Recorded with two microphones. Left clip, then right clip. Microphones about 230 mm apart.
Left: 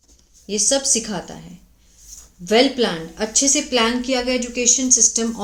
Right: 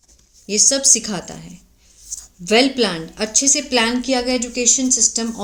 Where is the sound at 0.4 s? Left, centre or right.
Right.